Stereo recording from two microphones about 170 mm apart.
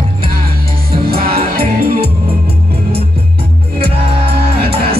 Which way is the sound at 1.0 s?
65° right (ahead or behind).